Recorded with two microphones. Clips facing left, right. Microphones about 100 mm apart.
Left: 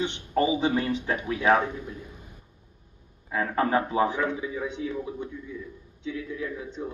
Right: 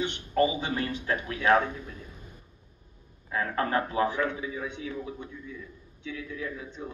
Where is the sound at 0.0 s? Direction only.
25° left (ahead or behind).